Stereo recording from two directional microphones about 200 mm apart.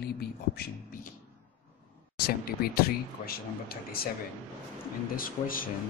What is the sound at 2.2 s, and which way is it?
Speech, 50° left (ahead or behind).